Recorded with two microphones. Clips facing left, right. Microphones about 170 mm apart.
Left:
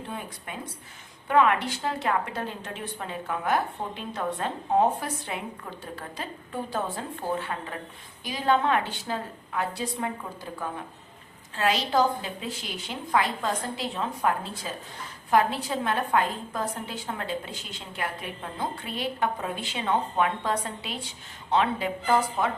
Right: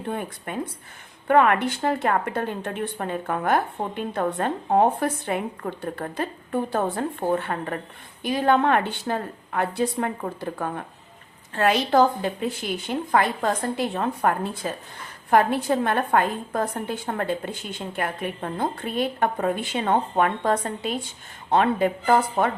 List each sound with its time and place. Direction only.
0.1 s a woman's voice: 55° right (ahead or behind)